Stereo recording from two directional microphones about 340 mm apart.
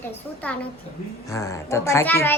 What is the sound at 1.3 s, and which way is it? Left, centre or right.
A child's voice, centre.